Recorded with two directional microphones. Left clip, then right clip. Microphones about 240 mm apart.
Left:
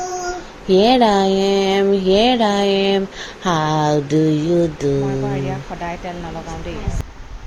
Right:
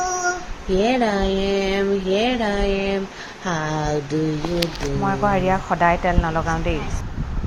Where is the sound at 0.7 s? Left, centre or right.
Left.